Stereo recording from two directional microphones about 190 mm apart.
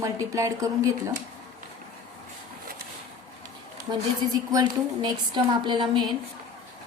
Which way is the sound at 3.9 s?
30° right (ahead or behind).